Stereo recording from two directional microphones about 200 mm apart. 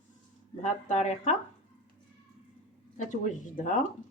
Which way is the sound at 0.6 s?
35° left (ahead or behind).